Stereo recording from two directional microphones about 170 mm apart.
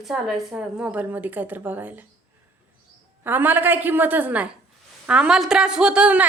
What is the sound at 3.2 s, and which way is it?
A woman's voice, 10° right (ahead or behind).